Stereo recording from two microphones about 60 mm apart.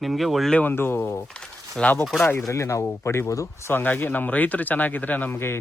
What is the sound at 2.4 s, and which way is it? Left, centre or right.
A man's voice, left.